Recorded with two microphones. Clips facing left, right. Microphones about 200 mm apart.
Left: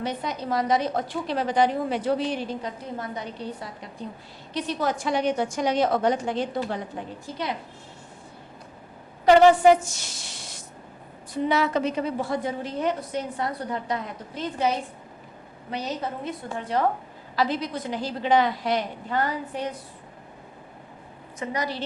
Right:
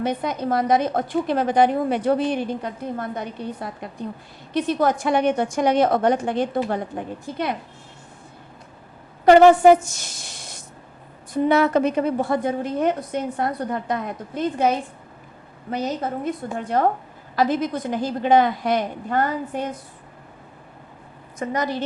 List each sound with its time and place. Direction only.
0.0 s a woman's voice: 55° right (ahead or behind)
9.2 s a woman's voice: 50° right (ahead or behind)
21.3 s a woman's voice: 50° right (ahead or behind)